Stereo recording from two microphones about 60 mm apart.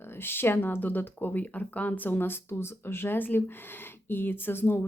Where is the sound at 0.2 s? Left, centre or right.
Left.